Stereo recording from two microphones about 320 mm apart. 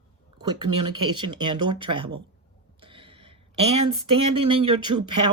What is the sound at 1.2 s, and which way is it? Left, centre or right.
Speech, centre.